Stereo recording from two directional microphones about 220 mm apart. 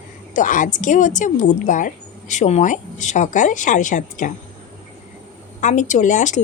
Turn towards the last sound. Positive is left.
turn(degrees=35)  # may be behind; listen again after turning